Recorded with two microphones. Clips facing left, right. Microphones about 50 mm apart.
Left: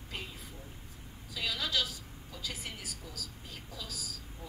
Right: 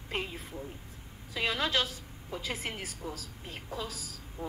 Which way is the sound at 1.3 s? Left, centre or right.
Right.